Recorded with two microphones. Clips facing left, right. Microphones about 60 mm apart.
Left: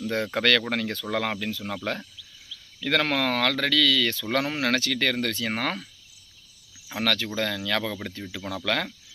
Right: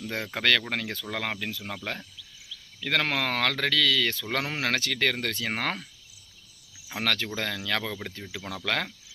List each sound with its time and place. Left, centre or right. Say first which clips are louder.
0.0 s speech: left 4 dB; centre
6.9 s speech: left 3 dB; right